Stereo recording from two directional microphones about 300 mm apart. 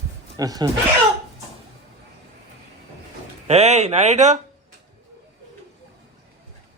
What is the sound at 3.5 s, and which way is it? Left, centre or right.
Speech, right.